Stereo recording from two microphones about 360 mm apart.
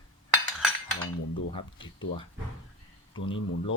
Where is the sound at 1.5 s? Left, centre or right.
Centre.